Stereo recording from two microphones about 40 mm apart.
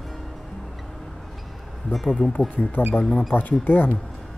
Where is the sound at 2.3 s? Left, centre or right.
Left.